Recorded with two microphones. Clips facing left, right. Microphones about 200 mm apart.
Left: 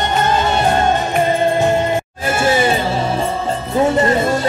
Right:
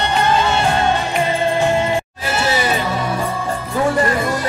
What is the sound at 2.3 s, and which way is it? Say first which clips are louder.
Music: left 5 dB; 50° left (ahead or behind).